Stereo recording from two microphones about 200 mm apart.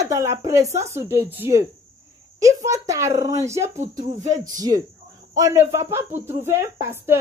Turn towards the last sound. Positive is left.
turn(degrees=-15)  # may be behind; listen again after turning